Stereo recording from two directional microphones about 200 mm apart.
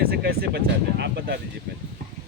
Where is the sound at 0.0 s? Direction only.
50° right (ahead or behind).